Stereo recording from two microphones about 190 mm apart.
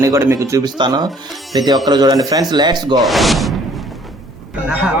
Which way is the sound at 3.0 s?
Centre (ahead or behind).